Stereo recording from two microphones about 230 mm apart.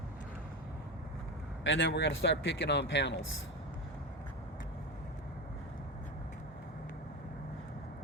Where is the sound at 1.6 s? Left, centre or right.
Left.